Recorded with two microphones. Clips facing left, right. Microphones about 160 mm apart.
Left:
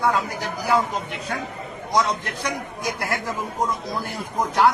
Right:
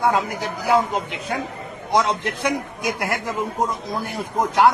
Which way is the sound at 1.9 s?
25° right (ahead or behind).